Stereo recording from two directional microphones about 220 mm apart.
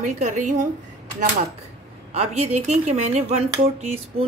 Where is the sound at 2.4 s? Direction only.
30° right (ahead or behind).